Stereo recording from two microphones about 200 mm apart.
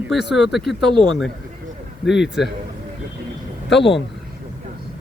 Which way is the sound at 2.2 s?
Centre (ahead or behind).